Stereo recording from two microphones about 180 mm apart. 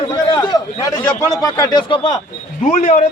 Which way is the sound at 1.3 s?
20° left (ahead or behind).